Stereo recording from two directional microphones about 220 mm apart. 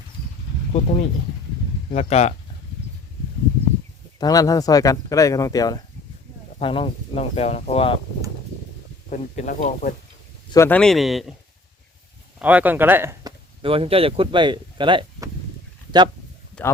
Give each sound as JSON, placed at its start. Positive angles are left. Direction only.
{"t": 0.7, "sound": "speech", "side_deg": 30}
{"t": 4.2, "sound": "speech", "side_deg": 15}
{"t": 9.0, "sound": "speech", "side_deg": 35}
{"t": 10.5, "sound": "speech", "side_deg": 10}
{"t": 12.4, "sound": "speech", "side_deg": -5}
{"t": 13.6, "sound": "speech", "side_deg": -25}
{"t": 16.6, "sound": "speech", "side_deg": 5}